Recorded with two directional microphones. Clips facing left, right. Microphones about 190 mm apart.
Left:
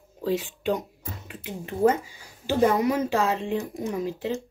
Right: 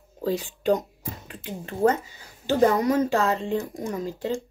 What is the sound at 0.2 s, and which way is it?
Speech, 40° right (ahead or behind).